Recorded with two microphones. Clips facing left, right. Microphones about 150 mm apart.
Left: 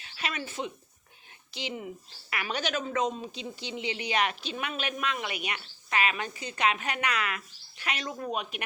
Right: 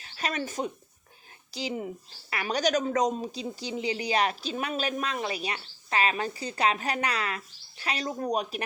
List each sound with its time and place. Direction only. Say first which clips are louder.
0.0 s speech: right 4 dB; 40° right (ahead or behind)